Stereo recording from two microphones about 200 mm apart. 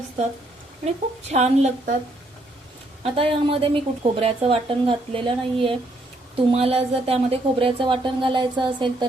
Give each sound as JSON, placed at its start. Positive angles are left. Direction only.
{"t": 1.3, "sound": "a woman's voice", "side_deg": -35}
{"t": 3.0, "sound": "speech", "side_deg": -25}